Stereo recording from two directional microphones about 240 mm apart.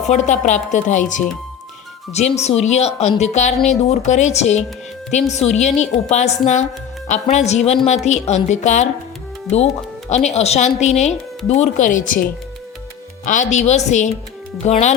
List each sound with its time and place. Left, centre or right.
0.1 s a woman's voice: left
10.1 s speech: left